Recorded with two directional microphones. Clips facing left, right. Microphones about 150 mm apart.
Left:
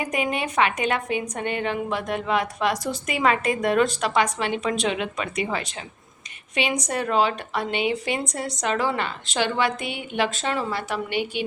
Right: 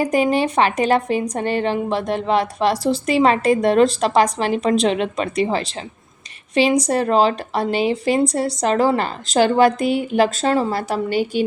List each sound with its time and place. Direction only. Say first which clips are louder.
0.0 s a woman's voice: right 9 dB; 35° right (ahead or behind)